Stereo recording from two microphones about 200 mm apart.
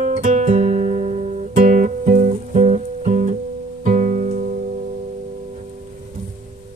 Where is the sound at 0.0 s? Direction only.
35° right (ahead or behind).